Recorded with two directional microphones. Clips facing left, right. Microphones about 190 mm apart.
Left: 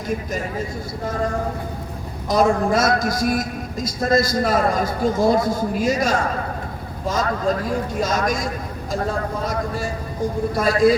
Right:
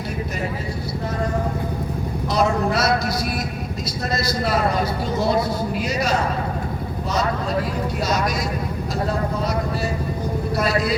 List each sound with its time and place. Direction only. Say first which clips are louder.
2.3 s a man's voice: left 3 dB; 45° left (ahead or behind)
8.0 s a man's voice: even; 45° left (ahead or behind)
10.5 s a man's voice: left 6 dB; 50° left (ahead or behind)